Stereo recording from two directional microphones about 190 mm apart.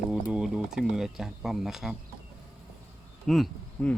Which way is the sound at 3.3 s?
5° left (ahead or behind).